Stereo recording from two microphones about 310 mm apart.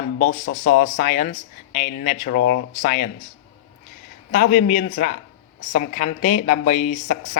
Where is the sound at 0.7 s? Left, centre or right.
Left.